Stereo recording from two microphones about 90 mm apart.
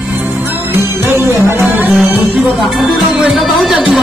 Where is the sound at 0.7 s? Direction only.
25° right (ahead or behind).